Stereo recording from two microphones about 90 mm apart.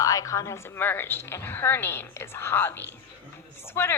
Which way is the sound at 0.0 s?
40° left (ahead or behind).